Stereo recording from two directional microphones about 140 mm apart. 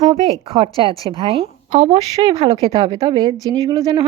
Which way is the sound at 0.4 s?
45° right (ahead or behind).